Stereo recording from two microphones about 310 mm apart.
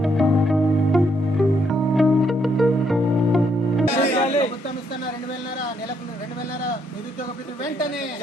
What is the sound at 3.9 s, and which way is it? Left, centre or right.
Music, left.